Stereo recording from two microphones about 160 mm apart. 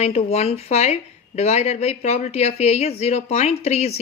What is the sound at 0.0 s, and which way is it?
Speech, 40° left (ahead or behind).